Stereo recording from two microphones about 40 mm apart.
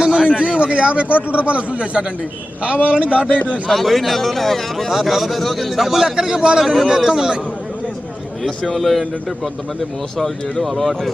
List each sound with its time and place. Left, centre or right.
0.0 s a man's voice: centre
3.2 s a man's voice: left
3.7 s a man's voice: centre; by 6.7 s right
6.7 s a man's voice: centre
8.7 s a man's voice: centre
10.6 s a man's voice: centre